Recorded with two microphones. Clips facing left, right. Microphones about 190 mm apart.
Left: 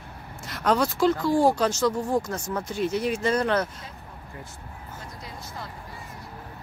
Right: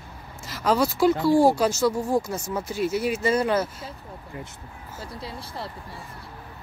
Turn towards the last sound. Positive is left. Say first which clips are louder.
# right 4 dB
turn(degrees=-30)  # may be behind; listen again after turning